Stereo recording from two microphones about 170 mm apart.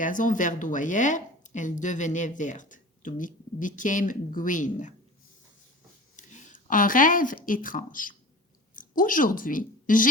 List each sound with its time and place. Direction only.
0.0 s speech: 50° left (ahead or behind)
6.1 s speech: 45° left (ahead or behind)